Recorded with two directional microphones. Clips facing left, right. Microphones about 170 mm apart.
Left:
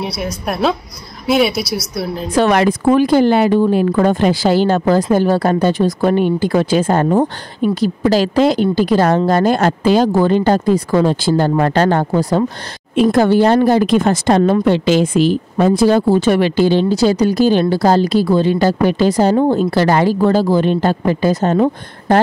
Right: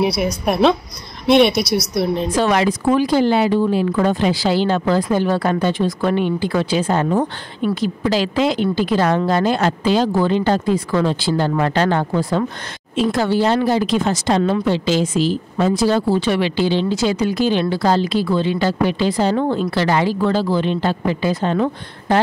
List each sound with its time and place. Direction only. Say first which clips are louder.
0.0 s a woman's voice: right 4 dB; centre (ahead or behind)
2.3 s a woman's voice: left 6 dB; 60° left (ahead or behind); by 12.4 s 40° left (ahead or behind)
12.9 s a woman's voice: left 6 dB; 55° left (ahead or behind)